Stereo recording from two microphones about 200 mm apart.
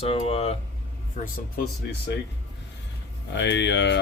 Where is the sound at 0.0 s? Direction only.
30° left (ahead or behind).